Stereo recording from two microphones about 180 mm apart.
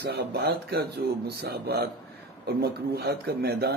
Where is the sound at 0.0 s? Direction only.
65° right (ahead or behind).